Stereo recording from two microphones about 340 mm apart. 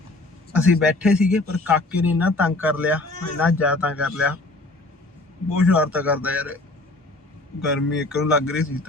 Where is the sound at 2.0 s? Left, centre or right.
Centre.